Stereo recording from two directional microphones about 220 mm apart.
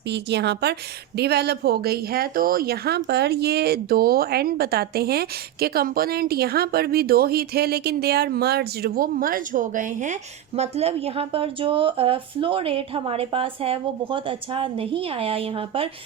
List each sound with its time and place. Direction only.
0.1 s a woman's voice: 50° right (ahead or behind); by 15.9 s 25° right (ahead or behind)